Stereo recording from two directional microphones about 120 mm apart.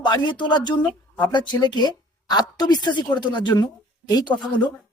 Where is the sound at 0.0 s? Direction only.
40° left (ahead or behind).